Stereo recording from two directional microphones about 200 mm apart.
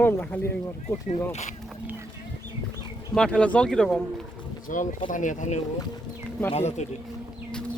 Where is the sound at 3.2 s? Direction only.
5° left (ahead or behind).